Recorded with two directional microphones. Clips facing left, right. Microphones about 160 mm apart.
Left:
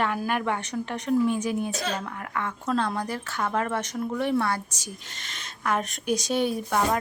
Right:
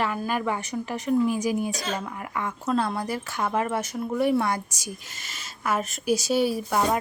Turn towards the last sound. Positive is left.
turn(degrees=-10)  # may be behind; listen again after turning